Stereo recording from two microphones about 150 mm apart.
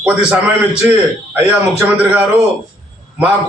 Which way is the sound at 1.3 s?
10° right (ahead or behind).